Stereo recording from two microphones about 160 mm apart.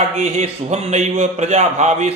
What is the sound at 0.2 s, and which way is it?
A man's voice, 40° right (ahead or behind).